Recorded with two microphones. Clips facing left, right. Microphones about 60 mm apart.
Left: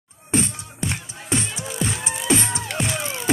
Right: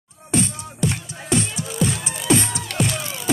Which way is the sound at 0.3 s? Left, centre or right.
Left.